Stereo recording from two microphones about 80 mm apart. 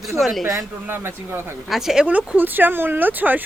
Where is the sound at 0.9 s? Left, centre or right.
Right.